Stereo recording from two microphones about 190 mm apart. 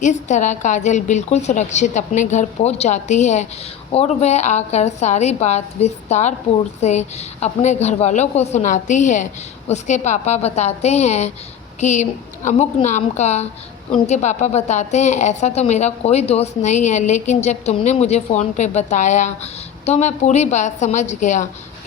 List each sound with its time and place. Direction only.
0.0 s a woman's voice: 40° left (ahead or behind)